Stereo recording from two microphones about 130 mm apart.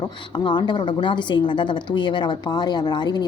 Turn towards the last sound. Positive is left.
turn(degrees=35)  # may be behind; listen again after turning